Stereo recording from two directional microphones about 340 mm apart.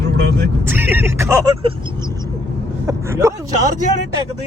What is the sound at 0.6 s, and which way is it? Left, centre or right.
Speech, centre.